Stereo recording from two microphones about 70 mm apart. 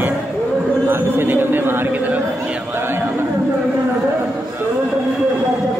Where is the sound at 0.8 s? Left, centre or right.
Right.